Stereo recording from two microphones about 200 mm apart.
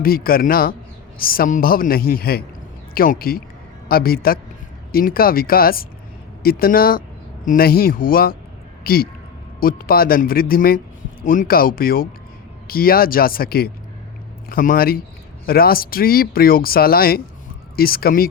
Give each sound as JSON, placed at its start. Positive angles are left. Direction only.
{"t": 0.0, "sound": "a man's voice", "side_deg": 45}